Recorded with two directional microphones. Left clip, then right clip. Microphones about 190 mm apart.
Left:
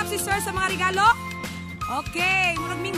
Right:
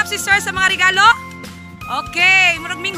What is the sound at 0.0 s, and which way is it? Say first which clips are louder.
Speech: right 10 dB; centre (ahead or behind).